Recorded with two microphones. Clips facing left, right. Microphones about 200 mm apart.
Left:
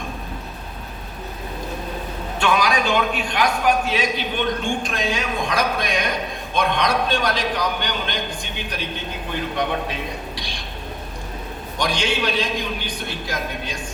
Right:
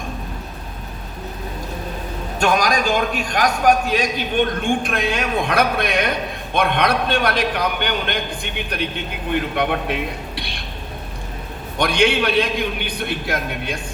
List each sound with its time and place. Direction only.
2.4 s a man's voice: 45° right (ahead or behind); by 10.6 s 60° right (ahead or behind)
11.8 s a man's voice: 60° right (ahead or behind)